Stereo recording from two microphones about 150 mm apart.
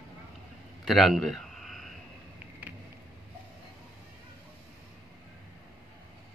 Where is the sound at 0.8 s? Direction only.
Centre (ahead or behind).